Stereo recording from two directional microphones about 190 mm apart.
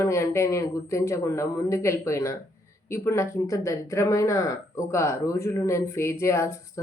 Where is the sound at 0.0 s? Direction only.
15° left (ahead or behind).